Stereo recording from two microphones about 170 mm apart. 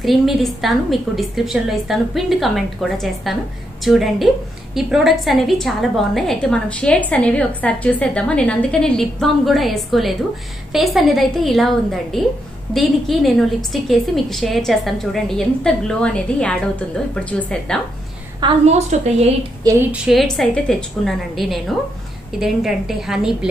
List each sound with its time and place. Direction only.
0.0 s a woman's voice: centre (ahead or behind)
18.7 s a woman's voice: 40° right (ahead or behind)
19.6 s speech: 20° right (ahead or behind)
19.9 s a woman's voice: centre (ahead or behind)